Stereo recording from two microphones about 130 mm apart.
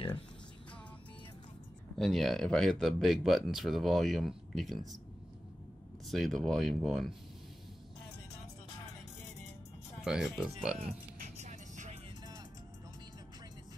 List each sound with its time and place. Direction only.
2.0 s speech: centre (ahead or behind)
6.0 s speech: centre (ahead or behind)
10.0 s speech: 5° right (ahead or behind)
11.3 s vehicle: 65° right (ahead or behind)